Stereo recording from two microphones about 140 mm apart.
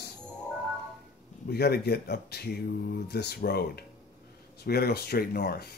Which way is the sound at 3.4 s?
90° left.